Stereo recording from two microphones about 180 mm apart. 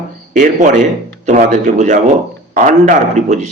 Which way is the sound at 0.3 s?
45° right (ahead or behind).